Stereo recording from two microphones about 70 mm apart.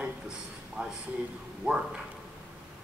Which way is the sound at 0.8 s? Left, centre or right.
Centre.